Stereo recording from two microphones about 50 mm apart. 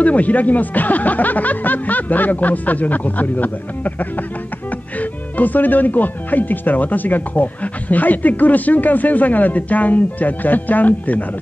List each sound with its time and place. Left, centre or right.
0.0 s speech: left